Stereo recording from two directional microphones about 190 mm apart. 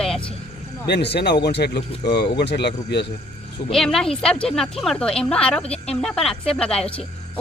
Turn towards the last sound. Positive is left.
turn(degrees=5)  # may be behind; listen again after turning